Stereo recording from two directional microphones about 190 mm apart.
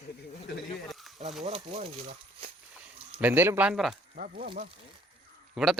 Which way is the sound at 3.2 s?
10° right (ahead or behind).